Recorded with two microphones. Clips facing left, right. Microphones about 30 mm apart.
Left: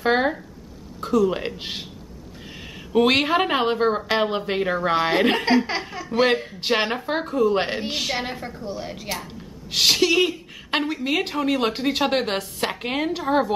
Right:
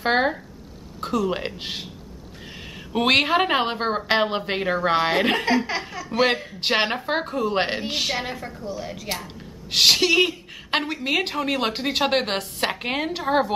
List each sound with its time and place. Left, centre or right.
0.0 s a sound: centre
1.0 s speech: centre
1.6 s a woman's voice: centre
2.9 s a woman's voice: centre
5.1 s a woman's voice: centre
6.0 s a woman's voice: centre
6.6 s a woman's voice: centre
7.9 s a woman's voice: centre
8.7 s a woman's voice: left
9.7 s a woman's voice: centre